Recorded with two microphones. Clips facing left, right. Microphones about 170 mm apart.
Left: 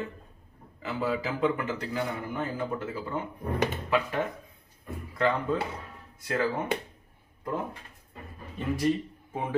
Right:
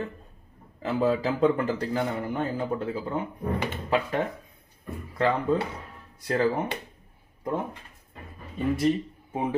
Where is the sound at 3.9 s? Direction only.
35° right (ahead or behind).